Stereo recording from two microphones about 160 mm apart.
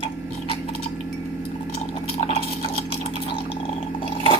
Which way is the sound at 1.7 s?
40° left (ahead or behind).